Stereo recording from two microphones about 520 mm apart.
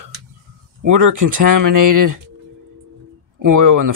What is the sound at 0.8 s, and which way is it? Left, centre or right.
Speech, right.